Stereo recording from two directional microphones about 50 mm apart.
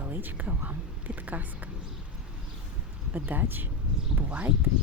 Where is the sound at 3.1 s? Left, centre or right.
Right.